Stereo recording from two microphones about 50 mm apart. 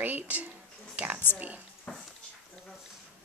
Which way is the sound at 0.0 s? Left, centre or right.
Right.